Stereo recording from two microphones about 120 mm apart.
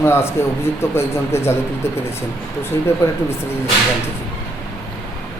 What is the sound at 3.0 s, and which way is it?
Speech, 20° left (ahead or behind).